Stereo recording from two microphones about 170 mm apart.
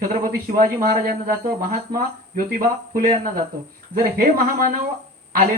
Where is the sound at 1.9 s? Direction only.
55° right (ahead or behind).